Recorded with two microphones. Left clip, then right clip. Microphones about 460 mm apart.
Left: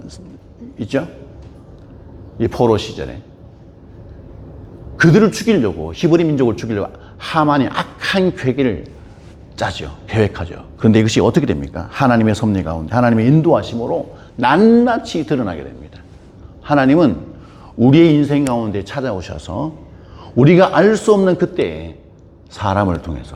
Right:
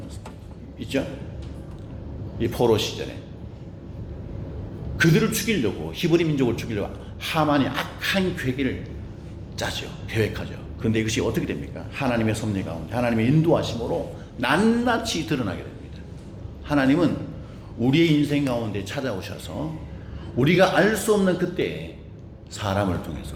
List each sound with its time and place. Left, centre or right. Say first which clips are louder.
0.8 s speech: left 7 dB; left
2.4 s speech: left 6 dB; left
4.9 s speech: left 9 dB; left
14.3 s speech: left 9 dB; left
14.8 s speech: left 6 dB; left
16.6 s a man's voice: left 9 dB; left
17.7 s speech: left 9 dB; left